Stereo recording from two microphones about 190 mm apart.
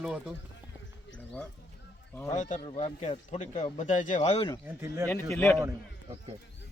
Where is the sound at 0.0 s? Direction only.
Centre (ahead or behind).